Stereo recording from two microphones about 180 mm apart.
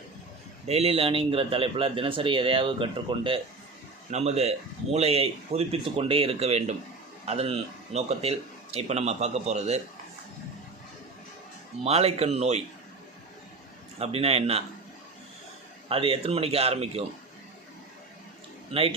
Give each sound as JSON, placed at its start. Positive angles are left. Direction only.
{"t": 0.7, "sound": "speech", "side_deg": -35}
{"t": 11.8, "sound": "speech", "side_deg": -35}
{"t": 14.0, "sound": "speech", "side_deg": -35}
{"t": 15.9, "sound": "speech", "side_deg": -30}
{"t": 18.7, "sound": "speech", "side_deg": -30}